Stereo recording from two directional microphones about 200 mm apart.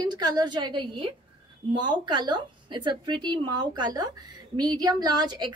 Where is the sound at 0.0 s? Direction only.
20° right (ahead or behind).